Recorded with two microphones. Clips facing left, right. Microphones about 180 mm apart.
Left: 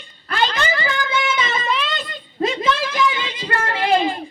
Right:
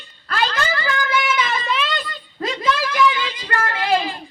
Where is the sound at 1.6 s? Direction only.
Centre (ahead or behind).